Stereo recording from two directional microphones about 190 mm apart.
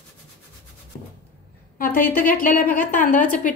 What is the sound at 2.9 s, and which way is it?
Speech, 40° left (ahead or behind).